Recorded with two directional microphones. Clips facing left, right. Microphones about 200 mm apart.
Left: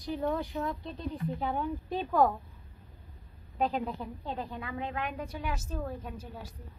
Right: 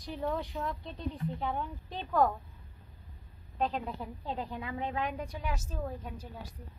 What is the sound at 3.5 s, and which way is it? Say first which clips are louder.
Speech: left 3 dB; 5° left (ahead or behind).